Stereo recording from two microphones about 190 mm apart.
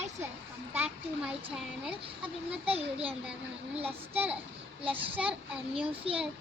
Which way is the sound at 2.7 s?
30° right (ahead or behind).